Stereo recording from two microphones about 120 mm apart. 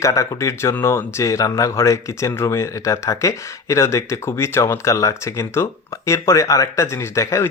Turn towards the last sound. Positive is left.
turn(degrees=25)  # may be behind; listen again after turning